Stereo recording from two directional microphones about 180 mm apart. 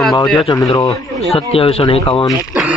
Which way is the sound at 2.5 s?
5° right (ahead or behind).